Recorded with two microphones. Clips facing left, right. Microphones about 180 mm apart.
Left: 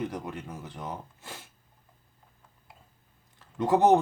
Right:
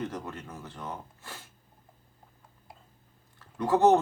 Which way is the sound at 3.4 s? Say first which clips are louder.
Left 1 dB; 15° left (ahead or behind).